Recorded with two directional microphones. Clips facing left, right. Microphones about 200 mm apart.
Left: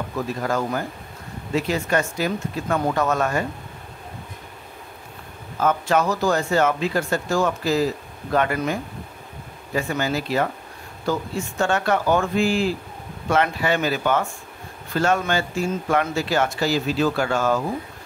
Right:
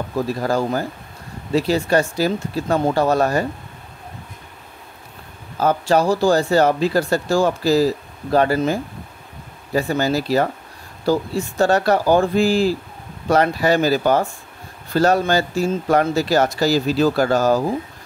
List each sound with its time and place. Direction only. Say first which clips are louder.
0.1 s speech: right 5 dB; 35° right (ahead or behind)
5.6 s speech: right 3 dB; 35° right (ahead or behind)
9.8 s speech: right 5 dB; 35° right (ahead or behind)